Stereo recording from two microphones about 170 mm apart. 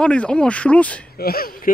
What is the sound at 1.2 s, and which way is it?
Speech, 60° left (ahead or behind).